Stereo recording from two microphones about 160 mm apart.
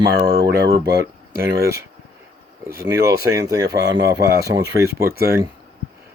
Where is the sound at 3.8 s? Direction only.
90° right.